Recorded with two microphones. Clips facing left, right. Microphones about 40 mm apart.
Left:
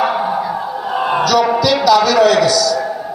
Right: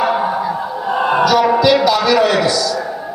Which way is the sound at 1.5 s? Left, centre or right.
Right.